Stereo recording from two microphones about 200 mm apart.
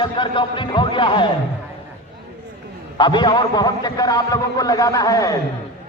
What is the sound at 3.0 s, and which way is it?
A man's voice, 20° left (ahead or behind).